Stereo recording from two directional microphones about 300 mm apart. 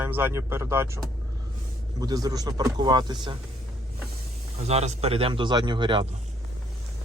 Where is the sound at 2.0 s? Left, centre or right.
Centre.